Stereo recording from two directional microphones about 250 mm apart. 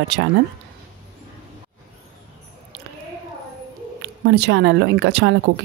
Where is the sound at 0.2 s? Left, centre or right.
Right.